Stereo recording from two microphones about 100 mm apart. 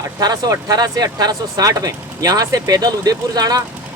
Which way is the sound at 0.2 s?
40° right (ahead or behind).